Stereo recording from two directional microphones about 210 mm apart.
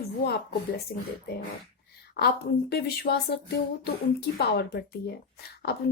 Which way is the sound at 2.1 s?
50° left (ahead or behind).